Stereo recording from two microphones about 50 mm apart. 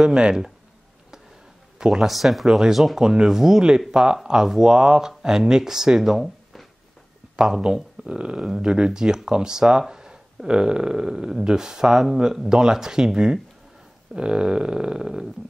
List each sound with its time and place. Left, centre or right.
0.0 s speech: centre
1.8 s speech: centre
2.0 s speech: centre
7.3 s speech: centre